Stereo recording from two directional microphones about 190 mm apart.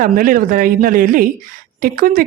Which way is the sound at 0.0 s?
45° right (ahead or behind).